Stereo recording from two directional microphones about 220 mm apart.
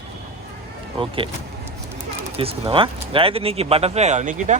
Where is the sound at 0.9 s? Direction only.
25° right (ahead or behind).